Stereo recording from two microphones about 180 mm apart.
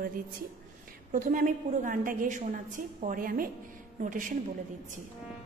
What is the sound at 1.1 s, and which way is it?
A woman's voice, 45° right (ahead or behind).